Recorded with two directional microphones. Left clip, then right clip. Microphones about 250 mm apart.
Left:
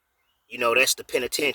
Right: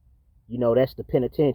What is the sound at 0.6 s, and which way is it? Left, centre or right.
Speech, left.